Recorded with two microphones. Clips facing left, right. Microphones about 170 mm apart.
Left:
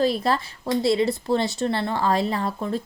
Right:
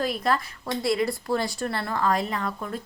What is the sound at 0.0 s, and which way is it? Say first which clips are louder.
A woman's voice: left 4 dB; 30° left (ahead or behind).